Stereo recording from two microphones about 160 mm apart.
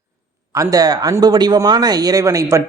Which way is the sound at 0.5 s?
20° right (ahead or behind).